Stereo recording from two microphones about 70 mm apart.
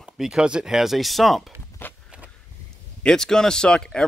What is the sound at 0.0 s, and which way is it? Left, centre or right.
Speech, centre.